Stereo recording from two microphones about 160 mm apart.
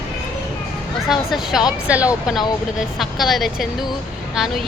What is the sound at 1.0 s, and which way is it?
A woman's voice, centre (ahead or behind).